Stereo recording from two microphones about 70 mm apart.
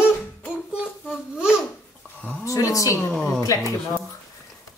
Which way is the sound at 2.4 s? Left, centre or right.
Left.